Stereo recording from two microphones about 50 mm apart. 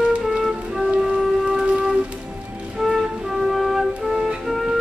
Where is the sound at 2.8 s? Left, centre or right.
Centre.